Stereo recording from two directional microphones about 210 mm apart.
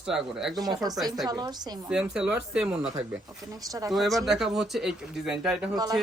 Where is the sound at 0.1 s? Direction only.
Centre (ahead or behind).